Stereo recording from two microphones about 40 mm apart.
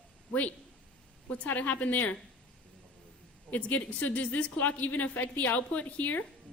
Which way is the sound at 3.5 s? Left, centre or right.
Left.